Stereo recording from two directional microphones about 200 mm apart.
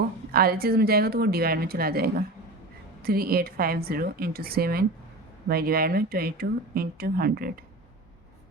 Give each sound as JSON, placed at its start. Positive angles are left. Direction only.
{"t": 0.3, "sound": "speech", "side_deg": -50}